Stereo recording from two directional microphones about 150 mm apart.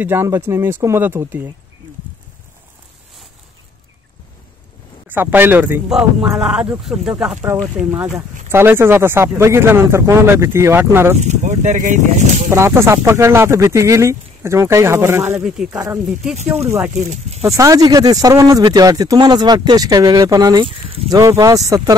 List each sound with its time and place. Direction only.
0.0 s speech: 15° right (ahead or behind)
5.0 s speech: 10° right (ahead or behind)
7.4 s speech: 20° right (ahead or behind)
7.8 s speech: 10° right (ahead or behind)
11.1 s speech: 50° right (ahead or behind)
12.4 s speech: 15° right (ahead or behind)
15.3 s speech: 5° right (ahead or behind)
16.6 s speech: 15° right (ahead or behind)
17.1 s speech: 45° right (ahead or behind)
17.6 s speech: 25° right (ahead or behind)